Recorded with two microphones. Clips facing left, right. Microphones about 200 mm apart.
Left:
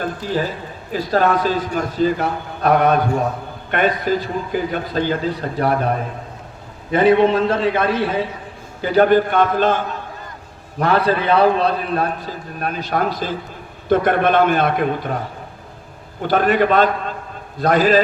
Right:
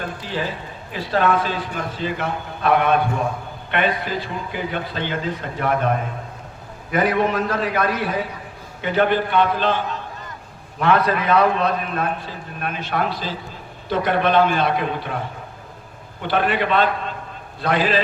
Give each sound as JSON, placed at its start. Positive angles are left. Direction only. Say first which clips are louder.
{"t": 0.2, "sound": "a man's voice", "louder": "left 5 dB", "side_deg": 45}
{"t": 6.9, "sound": "a man's voice", "louder": "left 6 dB", "side_deg": 25}
{"t": 8.8, "sound": "a man's voice", "louder": "left 5 dB", "side_deg": 40}
{"t": 10.8, "sound": "a man's voice", "louder": "left 2 dB", "side_deg": 35}
{"t": 16.2, "sound": "a man's voice", "louder": "left 5 dB", "side_deg": 40}